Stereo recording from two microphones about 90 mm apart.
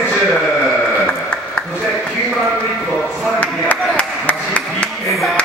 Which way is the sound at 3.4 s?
15° left (ahead or behind).